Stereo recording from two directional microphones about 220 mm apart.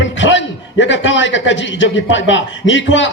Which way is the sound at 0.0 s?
55° left (ahead or behind).